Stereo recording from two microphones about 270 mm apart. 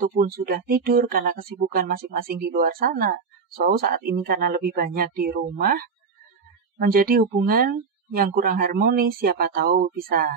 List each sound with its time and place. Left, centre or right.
0.0 s speech: right